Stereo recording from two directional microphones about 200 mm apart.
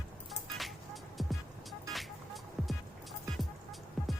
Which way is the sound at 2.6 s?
Centre (ahead or behind).